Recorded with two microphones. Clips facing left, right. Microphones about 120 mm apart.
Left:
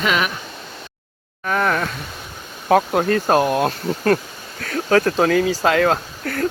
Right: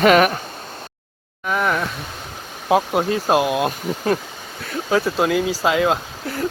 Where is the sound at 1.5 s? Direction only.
5° right (ahead or behind).